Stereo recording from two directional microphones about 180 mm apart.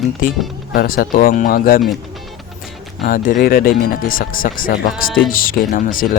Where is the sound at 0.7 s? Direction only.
50° left (ahead or behind).